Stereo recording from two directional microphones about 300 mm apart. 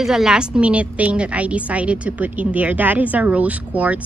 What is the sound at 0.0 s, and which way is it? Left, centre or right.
A woman's voice, centre.